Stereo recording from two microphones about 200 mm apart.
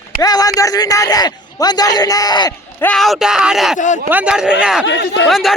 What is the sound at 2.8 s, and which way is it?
Speech, centre (ahead or behind).